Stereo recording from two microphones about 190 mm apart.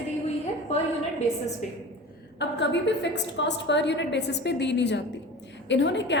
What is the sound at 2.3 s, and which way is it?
A woman's voice, 65° left (ahead or behind).